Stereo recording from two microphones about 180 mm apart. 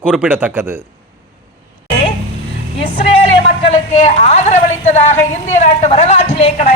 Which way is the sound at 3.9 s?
40° left (ahead or behind).